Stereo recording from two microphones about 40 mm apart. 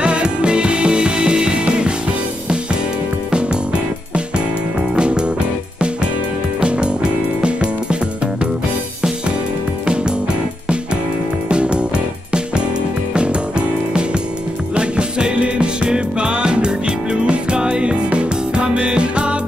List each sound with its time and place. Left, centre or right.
0.0 s music: right
4.9 s music: right
11.4 s music: right
13.1 s music: right